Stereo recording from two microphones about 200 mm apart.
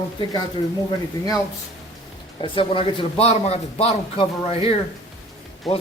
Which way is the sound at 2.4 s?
25° left (ahead or behind).